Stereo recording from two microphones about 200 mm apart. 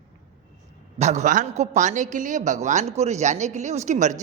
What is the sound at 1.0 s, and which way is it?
A man's voice, 35° right (ahead or behind).